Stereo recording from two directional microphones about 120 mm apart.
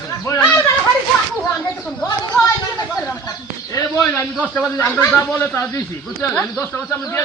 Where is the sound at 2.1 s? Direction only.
35° left (ahead or behind).